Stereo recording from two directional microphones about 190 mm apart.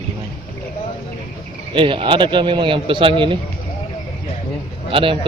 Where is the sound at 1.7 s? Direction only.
25° right (ahead or behind).